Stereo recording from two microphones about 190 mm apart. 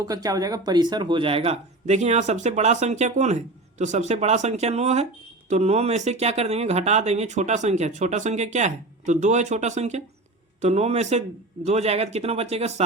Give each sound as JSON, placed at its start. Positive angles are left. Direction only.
{"t": 0.0, "sound": "speech", "side_deg": -20}